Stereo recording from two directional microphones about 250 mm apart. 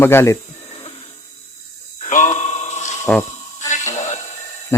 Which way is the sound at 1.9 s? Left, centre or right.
Left.